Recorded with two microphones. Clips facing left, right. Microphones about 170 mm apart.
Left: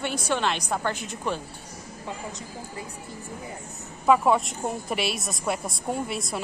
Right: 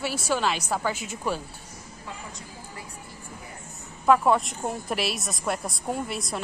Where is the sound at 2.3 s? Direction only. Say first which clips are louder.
Left 5 dB; 20° left (ahead or behind).